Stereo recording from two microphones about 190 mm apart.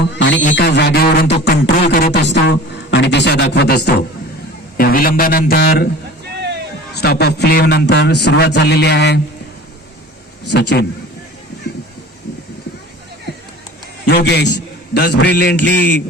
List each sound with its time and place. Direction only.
0.0 s a sound: 70° left (ahead or behind); by 2.0 s 55° left (ahead or behind)
2.2 s a man's voice: 65° left (ahead or behind)
4.8 s a man's voice: 50° left (ahead or behind)
6.9 s a man's voice: 55° left (ahead or behind)
10.4 s a man's voice: 65° left (ahead or behind)
14.1 s a man's voice: 60° left (ahead or behind)